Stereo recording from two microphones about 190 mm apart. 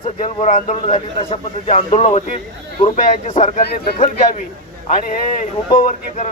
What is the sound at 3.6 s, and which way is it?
Speech, 55° left (ahead or behind).